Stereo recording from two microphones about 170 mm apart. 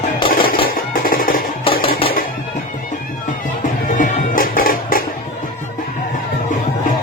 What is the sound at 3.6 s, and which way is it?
Music, 50° left (ahead or behind).